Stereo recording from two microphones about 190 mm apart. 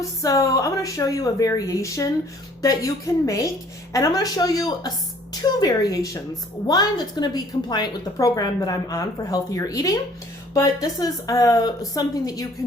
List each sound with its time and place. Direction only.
0.0 s a woman's voice: 20° left (ahead or behind)